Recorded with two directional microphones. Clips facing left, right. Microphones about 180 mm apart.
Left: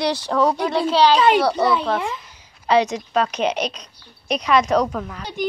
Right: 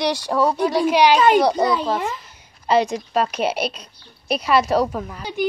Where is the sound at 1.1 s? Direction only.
45° right (ahead or behind).